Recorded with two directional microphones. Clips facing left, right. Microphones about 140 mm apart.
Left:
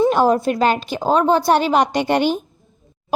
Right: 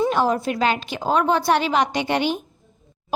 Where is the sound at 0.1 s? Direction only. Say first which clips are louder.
Left 5 dB; 45° left (ahead or behind).